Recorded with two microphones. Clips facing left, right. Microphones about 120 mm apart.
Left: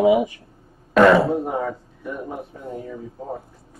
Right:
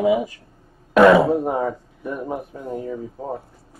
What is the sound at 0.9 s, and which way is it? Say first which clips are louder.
Speech: right 2 dB; 10° right (ahead or behind).